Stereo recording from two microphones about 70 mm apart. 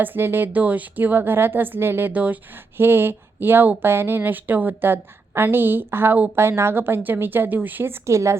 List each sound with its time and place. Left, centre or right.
0.0 s a woman's voice: right
6.3 s a woman's voice: right
8.0 s a woman's voice: right